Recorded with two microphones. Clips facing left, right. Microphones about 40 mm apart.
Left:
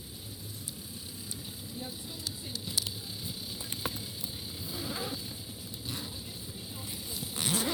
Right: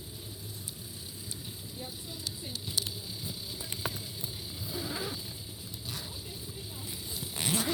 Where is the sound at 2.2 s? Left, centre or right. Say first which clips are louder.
Even; right.